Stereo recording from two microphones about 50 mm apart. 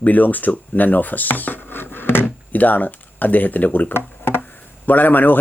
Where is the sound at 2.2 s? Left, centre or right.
Left.